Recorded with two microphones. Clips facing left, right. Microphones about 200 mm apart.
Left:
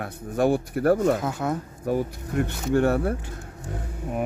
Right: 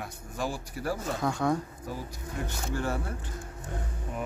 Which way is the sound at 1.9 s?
65° left (ahead or behind).